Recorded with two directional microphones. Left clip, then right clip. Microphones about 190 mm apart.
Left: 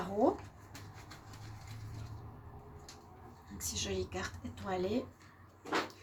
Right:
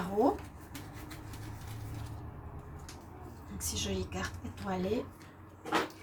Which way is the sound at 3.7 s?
50° left (ahead or behind).